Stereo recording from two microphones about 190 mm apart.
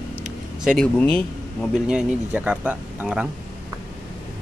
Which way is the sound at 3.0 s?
5° right (ahead or behind).